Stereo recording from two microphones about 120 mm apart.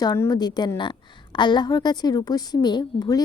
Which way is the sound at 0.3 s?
35° left (ahead or behind).